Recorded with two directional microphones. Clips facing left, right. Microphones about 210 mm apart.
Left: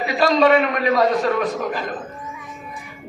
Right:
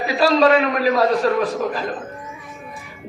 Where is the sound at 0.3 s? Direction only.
Centre (ahead or behind).